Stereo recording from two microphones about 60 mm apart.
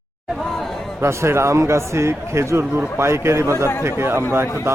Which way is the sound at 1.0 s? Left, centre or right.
Right.